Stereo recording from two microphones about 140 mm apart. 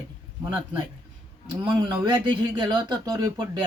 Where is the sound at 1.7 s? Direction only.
30° right (ahead or behind).